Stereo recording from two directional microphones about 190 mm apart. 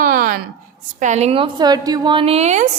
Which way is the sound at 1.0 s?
35° right (ahead or behind).